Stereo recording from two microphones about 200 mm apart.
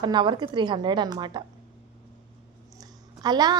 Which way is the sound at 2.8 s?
20° right (ahead or behind).